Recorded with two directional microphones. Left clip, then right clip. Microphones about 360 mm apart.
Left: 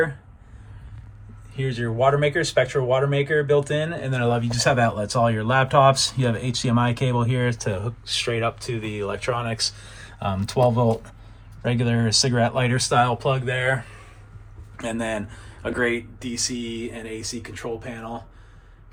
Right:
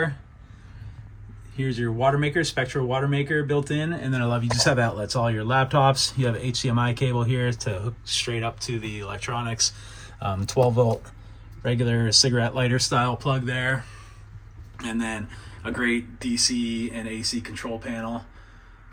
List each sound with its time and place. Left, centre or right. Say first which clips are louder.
1.7 s speech: left 3 dB; centre
14.8 s speech: left 3 dB; centre